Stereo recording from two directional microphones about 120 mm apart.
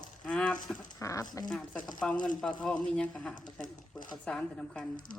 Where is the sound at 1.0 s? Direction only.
25° left (ahead or behind).